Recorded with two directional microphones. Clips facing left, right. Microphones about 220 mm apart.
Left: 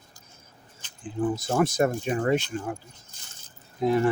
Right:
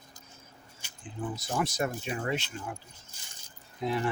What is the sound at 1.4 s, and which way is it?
Speech, 50° left (ahead or behind).